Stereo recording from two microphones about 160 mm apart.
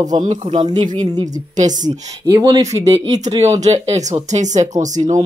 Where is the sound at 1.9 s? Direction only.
25° right (ahead or behind).